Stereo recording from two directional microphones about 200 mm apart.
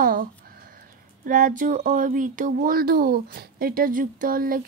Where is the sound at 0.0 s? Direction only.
45° right (ahead or behind).